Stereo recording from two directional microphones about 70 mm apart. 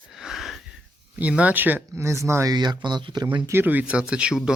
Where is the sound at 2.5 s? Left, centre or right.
Right.